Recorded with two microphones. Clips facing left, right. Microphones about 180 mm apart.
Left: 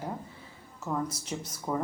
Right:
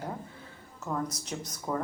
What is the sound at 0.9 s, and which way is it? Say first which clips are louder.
Speech: left 1 dB; 5° left (ahead or behind).